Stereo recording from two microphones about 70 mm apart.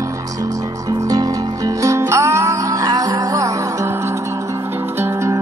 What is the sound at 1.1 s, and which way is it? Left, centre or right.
Music, right.